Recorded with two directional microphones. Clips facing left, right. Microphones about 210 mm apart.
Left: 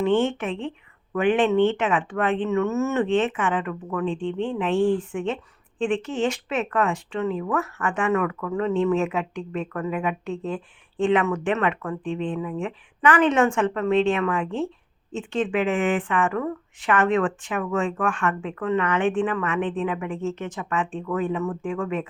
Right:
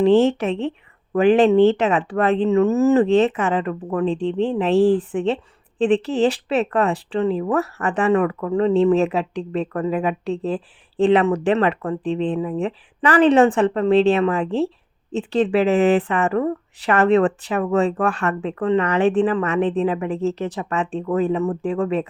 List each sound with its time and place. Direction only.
0.0 s speech: 35° right (ahead or behind)